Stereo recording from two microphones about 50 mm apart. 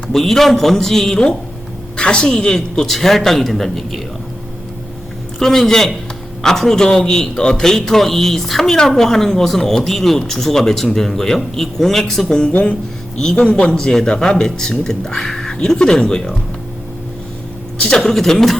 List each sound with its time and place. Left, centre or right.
0.1 s a woman's voice: centre
2.6 s a man's voice: centre
5.4 s speech: centre
12.5 s a woman's voice: left
17.8 s speech: centre